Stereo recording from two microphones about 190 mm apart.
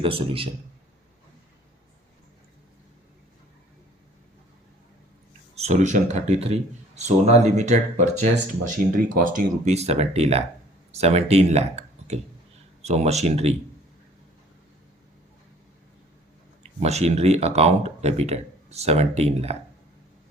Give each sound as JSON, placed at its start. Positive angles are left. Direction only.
{"t": 0.0, "sound": "a man's voice", "side_deg": -30}
{"t": 5.5, "sound": "speech", "side_deg": -35}
{"t": 16.8, "sound": "speech", "side_deg": -35}